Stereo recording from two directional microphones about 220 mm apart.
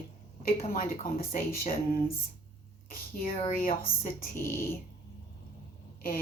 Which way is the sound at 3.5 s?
40° left (ahead or behind).